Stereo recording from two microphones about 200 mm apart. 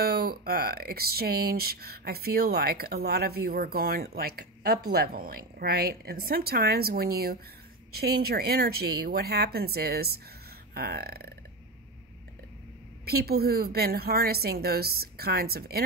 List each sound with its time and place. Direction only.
0.0 s speech: 50° right (ahead or behind)
13.0 s speech: 50° right (ahead or behind)